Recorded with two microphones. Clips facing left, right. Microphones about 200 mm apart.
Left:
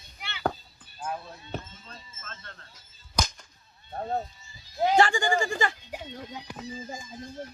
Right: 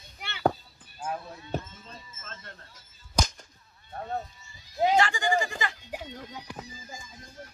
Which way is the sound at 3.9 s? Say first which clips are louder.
Left 3 dB; 30° left (ahead or behind).